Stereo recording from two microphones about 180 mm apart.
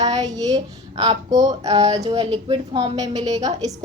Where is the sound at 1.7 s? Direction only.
35° right (ahead or behind).